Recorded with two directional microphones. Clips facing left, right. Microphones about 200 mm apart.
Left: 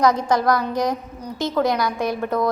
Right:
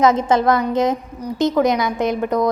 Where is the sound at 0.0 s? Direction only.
20° right (ahead or behind).